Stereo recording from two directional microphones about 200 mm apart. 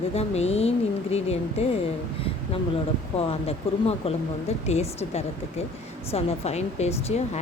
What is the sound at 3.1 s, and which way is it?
Speech, 30° left (ahead or behind).